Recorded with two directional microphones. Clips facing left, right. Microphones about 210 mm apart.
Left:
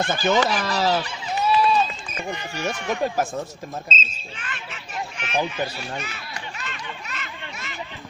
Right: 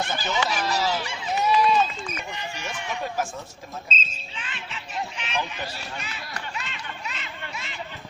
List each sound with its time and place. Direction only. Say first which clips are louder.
0.0 s speech: left 7 dB; 50° left (ahead or behind)
1.4 s run: left 1 dB; 20° right (ahead or behind)
2.2 s speech: left 6 dB; 45° left (ahead or behind)
4.4 s a sound: even; 50° left (ahead or behind)
6.5 s snicker: left 1 dB; 50° left (ahead or behind)